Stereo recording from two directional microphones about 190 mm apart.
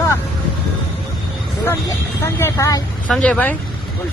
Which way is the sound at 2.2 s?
15° left (ahead or behind).